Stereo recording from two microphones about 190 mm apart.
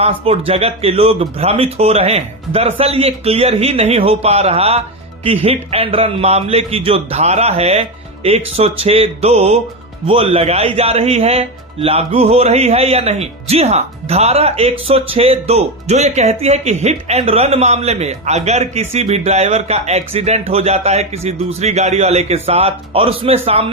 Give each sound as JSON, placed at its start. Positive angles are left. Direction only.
{"t": 0.0, "sound": "a man's voice", "side_deg": -30}